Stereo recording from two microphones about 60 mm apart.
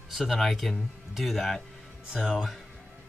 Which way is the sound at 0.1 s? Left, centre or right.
Centre.